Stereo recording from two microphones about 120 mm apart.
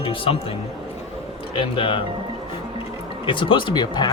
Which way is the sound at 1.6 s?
45° left (ahead or behind).